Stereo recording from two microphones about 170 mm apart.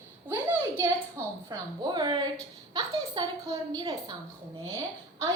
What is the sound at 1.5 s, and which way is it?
A woman's voice, 25° right (ahead or behind).